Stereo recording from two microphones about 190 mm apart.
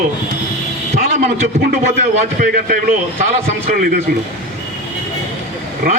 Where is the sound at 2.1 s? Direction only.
45° right (ahead or behind).